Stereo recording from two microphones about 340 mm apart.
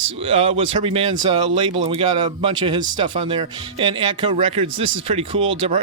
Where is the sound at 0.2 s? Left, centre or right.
Centre.